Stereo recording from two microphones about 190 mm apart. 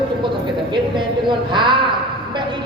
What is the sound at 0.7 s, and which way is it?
A woman's voice, 25° right (ahead or behind).